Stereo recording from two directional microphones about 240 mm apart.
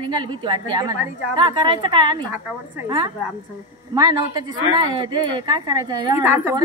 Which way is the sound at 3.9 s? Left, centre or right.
Centre.